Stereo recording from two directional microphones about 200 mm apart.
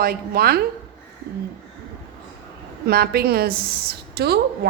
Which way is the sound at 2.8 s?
50° right (ahead or behind).